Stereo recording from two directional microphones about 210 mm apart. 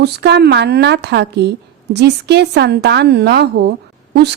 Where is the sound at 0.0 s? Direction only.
50° right (ahead or behind).